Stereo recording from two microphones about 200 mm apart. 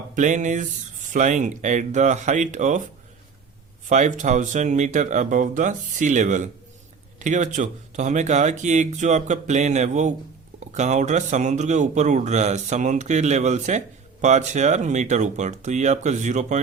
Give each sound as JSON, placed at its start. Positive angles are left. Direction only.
{"t": 0.1, "sound": "speech", "side_deg": -40}
{"t": 3.8, "sound": "speech", "side_deg": -35}